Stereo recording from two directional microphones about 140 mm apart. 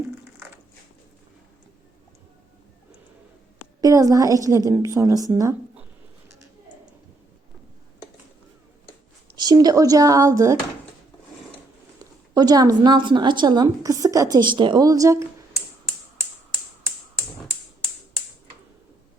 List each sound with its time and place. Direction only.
3.8 s a woman's voice: 25° right (ahead or behind)
9.3 s a woman's voice: 30° right (ahead or behind)
12.3 s a woman's voice: 30° right (ahead or behind)